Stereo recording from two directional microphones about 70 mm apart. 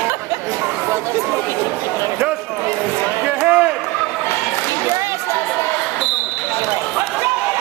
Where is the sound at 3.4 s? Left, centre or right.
Centre.